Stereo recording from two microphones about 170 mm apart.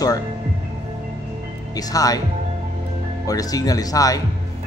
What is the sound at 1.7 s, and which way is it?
Speech, 20° left (ahead or behind).